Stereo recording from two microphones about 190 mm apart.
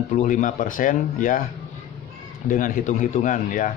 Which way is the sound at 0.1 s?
45° left (ahead or behind).